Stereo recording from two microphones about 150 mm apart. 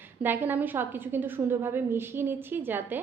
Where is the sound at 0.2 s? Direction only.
15° right (ahead or behind).